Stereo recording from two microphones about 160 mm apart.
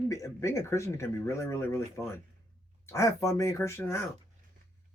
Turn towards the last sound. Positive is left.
turn(degrees=15)  # may be behind; listen again after turning